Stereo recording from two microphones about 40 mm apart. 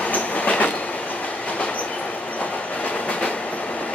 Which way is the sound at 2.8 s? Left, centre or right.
Left.